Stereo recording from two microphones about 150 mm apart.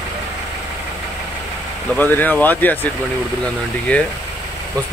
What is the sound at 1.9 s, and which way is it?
Speech, 10° left (ahead or behind).